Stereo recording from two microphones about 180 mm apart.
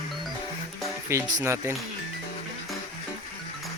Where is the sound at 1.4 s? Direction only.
15° right (ahead or behind).